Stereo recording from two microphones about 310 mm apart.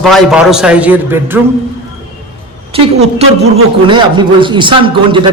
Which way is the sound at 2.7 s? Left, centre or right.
Centre.